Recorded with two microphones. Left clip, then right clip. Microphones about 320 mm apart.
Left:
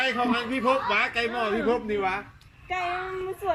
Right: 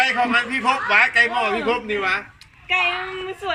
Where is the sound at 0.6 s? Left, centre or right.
Centre.